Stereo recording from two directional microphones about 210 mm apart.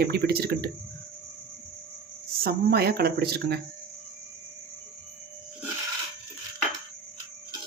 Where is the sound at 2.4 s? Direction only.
50° right (ahead or behind).